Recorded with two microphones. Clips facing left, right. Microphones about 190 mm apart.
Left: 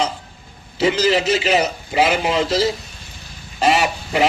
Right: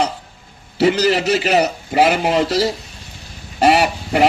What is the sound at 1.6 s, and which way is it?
Speech, 55° right (ahead or behind).